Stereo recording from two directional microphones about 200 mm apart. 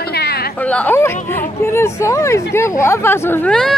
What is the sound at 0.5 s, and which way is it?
Speech, 5° left (ahead or behind).